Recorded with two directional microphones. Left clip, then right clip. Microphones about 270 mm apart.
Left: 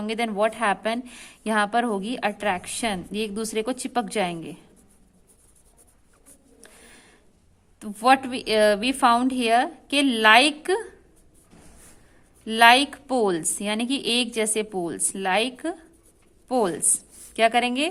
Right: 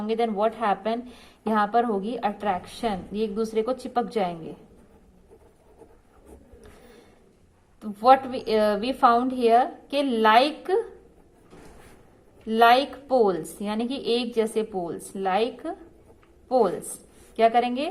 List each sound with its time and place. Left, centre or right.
0.0 s a woman's voice: left
7.8 s a woman's voice: left
12.5 s a woman's voice: left